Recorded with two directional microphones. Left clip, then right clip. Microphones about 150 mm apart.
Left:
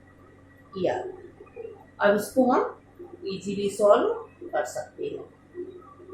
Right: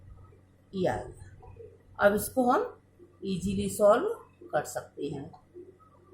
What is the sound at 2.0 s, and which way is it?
Speech, 45° right (ahead or behind).